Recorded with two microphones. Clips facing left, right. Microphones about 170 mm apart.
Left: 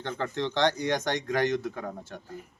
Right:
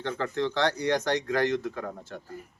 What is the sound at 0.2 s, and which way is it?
Speech, 20° left (ahead or behind).